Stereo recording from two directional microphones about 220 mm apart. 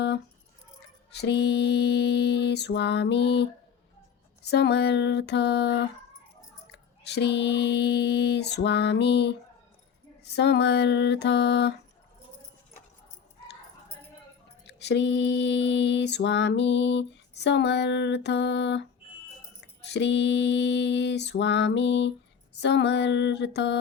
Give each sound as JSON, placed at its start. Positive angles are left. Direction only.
{"t": 1.1, "sound": "mantra", "side_deg": 50}
{"t": 14.7, "sound": "mantra", "side_deg": 50}
{"t": 19.9, "sound": "mantra", "side_deg": 50}